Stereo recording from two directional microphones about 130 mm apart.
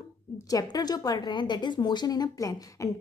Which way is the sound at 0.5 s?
30° left (ahead or behind).